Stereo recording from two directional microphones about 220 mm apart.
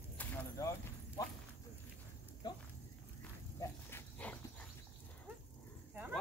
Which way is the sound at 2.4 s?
20° left (ahead or behind).